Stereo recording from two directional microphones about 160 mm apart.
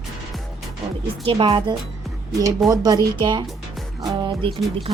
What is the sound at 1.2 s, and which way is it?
Speech, 35° right (ahead or behind).